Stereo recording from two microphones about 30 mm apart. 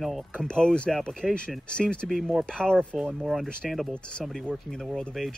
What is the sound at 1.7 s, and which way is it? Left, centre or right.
Speech, left.